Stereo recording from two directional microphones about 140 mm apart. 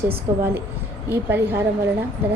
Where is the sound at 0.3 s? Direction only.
20° right (ahead or behind).